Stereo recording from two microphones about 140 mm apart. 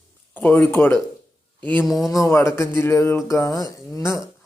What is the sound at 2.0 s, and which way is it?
A man's voice, 25° left (ahead or behind).